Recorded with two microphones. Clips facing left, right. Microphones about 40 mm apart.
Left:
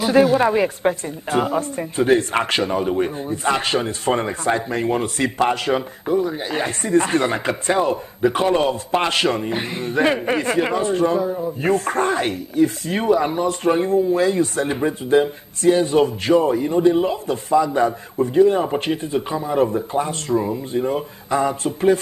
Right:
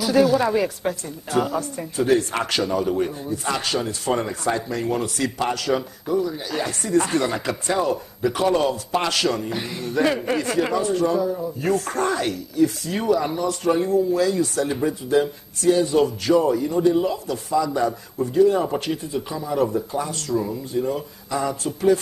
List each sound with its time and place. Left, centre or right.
0.0 s speech: left